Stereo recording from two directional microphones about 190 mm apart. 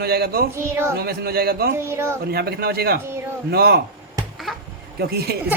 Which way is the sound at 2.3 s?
55° right (ahead or behind).